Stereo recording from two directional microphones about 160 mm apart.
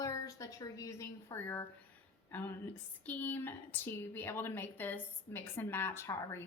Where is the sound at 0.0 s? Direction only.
20° left (ahead or behind).